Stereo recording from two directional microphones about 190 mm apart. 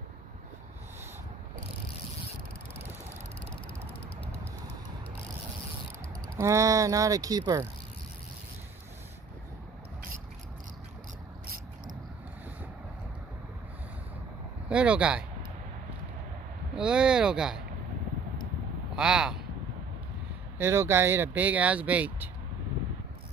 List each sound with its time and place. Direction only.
6.3 s speech: 15° right (ahead or behind)
14.7 s speech: 5° right (ahead or behind)
16.7 s speech: 5° right (ahead or behind)
18.9 s speech: 5° right (ahead or behind)
20.5 s speech: 10° right (ahead or behind)